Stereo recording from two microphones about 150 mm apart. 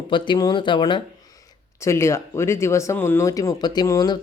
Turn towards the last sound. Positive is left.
turn(degrees=25)  # may be behind; listen again after turning